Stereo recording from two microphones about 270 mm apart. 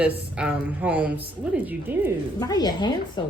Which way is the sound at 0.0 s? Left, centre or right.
Centre.